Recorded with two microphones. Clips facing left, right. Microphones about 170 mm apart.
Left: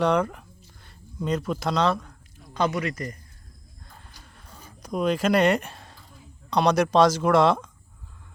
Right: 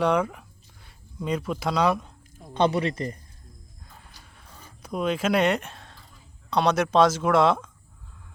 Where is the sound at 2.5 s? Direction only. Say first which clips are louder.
Right 3 dB; 30° right (ahead or behind).